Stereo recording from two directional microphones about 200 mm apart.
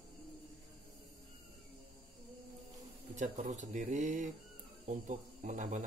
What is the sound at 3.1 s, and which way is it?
Speech, 35° right (ahead or behind).